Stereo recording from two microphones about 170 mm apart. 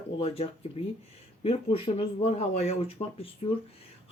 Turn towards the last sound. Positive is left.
turn(degrees=35)  # may be behind; listen again after turning